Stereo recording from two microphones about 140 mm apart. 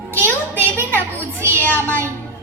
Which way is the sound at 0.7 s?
15° right (ahead or behind).